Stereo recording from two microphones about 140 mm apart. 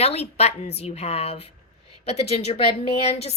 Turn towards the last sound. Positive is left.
turn(degrees=50)  # may be behind; listen again after turning